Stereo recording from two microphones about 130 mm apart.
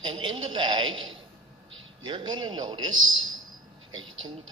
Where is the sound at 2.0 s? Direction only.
35° right (ahead or behind).